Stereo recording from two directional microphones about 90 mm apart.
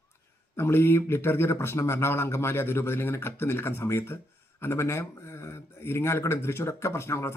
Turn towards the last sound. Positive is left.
turn(degrees=30)  # may be behind; listen again after turning